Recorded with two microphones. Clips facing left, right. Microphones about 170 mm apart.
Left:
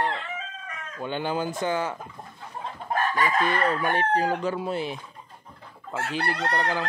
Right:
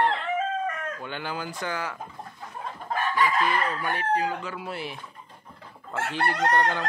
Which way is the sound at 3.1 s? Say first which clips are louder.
Right 2 dB; 45° left (ahead or behind).